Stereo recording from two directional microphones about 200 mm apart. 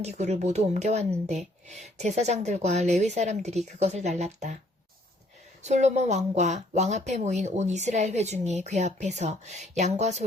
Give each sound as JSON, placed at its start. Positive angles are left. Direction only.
{"t": 0.0, "sound": "speech", "side_deg": -35}
{"t": 5.6, "sound": "speech", "side_deg": -35}